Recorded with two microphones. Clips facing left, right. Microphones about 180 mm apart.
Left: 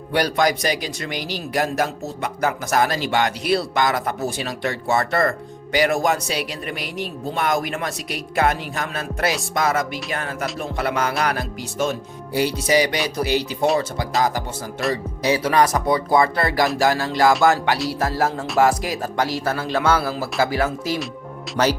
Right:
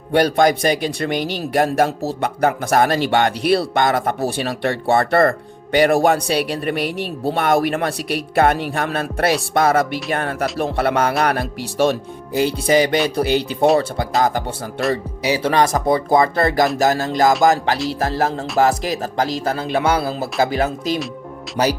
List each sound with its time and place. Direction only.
0.1 s speech: 50° right (ahead or behind)
12.4 s speech: 25° right (ahead or behind)
12.7 s speech: 50° right (ahead or behind)
14.8 s music: centre (ahead or behind)
15.4 s speech: 25° right (ahead or behind)
15.9 s speech: 45° right (ahead or behind)
17.4 s music: 40° right (ahead or behind)
19.3 s speech: 20° right (ahead or behind)
21.6 s music: 30° right (ahead or behind)